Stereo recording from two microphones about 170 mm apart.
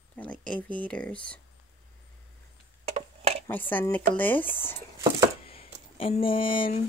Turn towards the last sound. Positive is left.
turn(degrees=30)  # may be behind; listen again after turning